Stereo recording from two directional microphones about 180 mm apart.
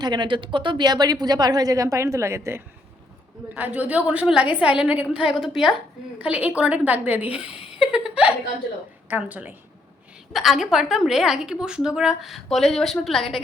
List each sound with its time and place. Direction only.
0.0 s a woman's voice: 25° right (ahead or behind); by 7.5 s 5° right (ahead or behind)
7.7 s laughter: 5° right (ahead or behind)
9.0 s a woman's voice: 10° right (ahead or behind)